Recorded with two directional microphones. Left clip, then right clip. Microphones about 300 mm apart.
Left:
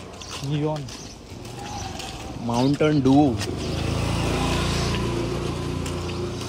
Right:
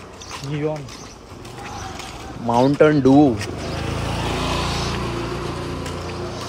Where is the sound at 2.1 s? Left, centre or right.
Centre.